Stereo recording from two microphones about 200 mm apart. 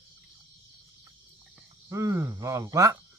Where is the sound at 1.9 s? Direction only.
15° right (ahead or behind).